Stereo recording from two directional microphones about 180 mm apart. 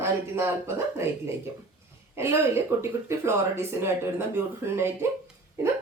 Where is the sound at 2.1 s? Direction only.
15° right (ahead or behind).